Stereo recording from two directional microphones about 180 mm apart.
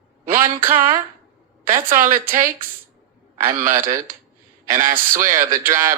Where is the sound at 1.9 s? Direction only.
50° right (ahead or behind).